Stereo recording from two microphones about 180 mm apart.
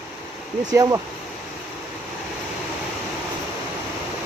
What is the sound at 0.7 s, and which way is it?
Speech, 15° right (ahead or behind).